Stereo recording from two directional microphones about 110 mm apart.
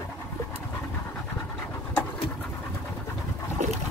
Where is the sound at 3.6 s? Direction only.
90° right.